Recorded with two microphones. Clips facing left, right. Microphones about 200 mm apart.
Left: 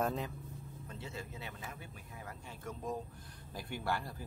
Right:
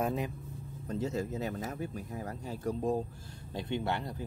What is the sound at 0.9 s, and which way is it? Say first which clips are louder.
Speech: right 14 dB; 40° right (ahead or behind).